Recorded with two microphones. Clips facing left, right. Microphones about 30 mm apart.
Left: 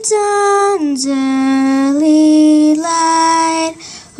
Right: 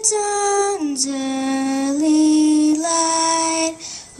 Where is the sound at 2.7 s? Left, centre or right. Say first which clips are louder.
Left 7 dB; left.